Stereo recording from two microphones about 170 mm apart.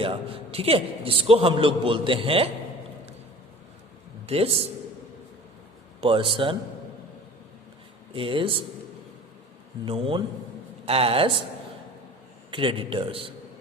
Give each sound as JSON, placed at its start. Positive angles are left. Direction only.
{"t": 0.0, "sound": "a man's voice", "side_deg": -35}
{"t": 4.3, "sound": "a man's voice", "side_deg": -35}
{"t": 6.0, "sound": "a man's voice", "side_deg": -30}
{"t": 8.1, "sound": "a man's voice", "side_deg": -30}
{"t": 9.8, "sound": "a man's voice", "side_deg": -30}
{"t": 12.5, "sound": "a man's voice", "side_deg": -30}